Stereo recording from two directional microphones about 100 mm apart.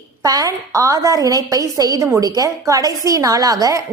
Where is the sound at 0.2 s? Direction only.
35° right (ahead or behind).